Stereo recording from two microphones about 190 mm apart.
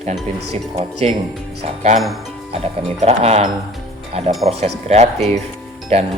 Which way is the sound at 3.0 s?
35° right (ahead or behind).